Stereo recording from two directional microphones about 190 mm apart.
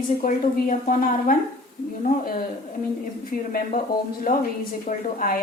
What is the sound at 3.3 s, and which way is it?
Speech, 50° left (ahead or behind).